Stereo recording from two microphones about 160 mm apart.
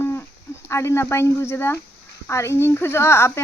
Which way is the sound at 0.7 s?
15° left (ahead or behind).